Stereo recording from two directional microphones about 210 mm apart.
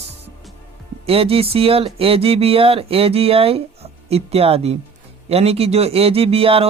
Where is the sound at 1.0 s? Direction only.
25° right (ahead or behind).